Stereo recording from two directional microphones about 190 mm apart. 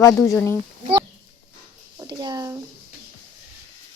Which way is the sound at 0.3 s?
15° left (ahead or behind).